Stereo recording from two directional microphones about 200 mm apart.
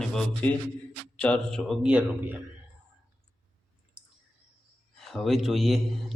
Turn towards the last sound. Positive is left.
turn(degrees=0)  # may be behind; listen again after turning